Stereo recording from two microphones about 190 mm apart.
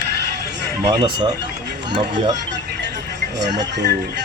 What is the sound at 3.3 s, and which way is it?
Speech, 65° right (ahead or behind).